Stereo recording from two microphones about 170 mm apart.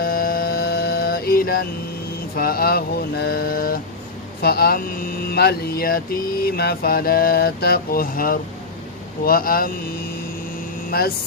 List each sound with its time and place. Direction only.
0.0 s music: 60° left (ahead or behind)
2.3 s speech: 60° left (ahead or behind)